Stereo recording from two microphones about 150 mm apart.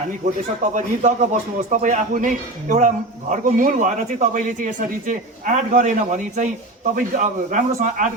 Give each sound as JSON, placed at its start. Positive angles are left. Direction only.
{"t": 0.7, "sound": "a man's voice", "side_deg": -55}